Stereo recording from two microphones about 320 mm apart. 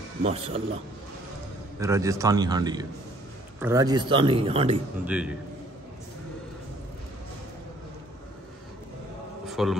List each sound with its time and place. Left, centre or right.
0.2 s a man's voice: centre
1.8 s a man's voice: centre
5.0 s a man's voice: centre
9.5 s a man's voice: centre